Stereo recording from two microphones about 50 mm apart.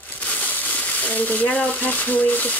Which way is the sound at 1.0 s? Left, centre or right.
Left.